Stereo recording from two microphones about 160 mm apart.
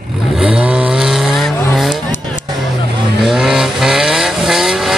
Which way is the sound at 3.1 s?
Centre (ahead or behind).